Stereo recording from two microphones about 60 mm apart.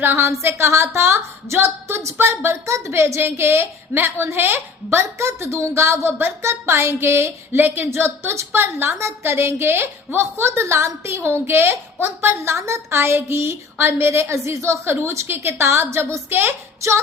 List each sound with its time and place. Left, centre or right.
0.0 s speech: right
2.6 s a woman's voice: right
2.9 s speech: right